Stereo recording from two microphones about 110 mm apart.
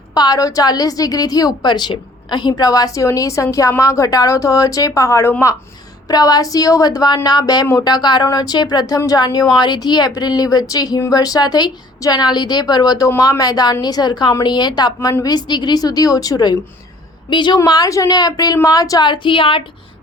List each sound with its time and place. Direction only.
0.1 s a woman's voice: 35° left (ahead or behind)
13.1 s a woman's voice: 25° left (ahead or behind); by 17.6 s 45° left (ahead or behind)
17.6 s a woman's voice: 35° left (ahead or behind); by 19.6 s 55° left (ahead or behind)